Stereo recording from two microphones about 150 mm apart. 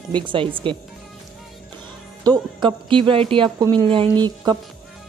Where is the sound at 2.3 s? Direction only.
30° right (ahead or behind).